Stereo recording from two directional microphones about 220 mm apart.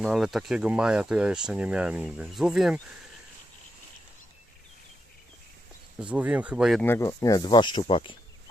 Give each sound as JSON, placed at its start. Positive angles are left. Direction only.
{"t": 0.0, "sound": "speech", "side_deg": 0}
{"t": 6.0, "sound": "speech", "side_deg": -5}
{"t": 6.8, "sound": "speech", "side_deg": 10}